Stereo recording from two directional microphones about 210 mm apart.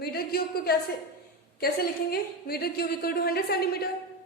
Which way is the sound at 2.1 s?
45° left (ahead or behind).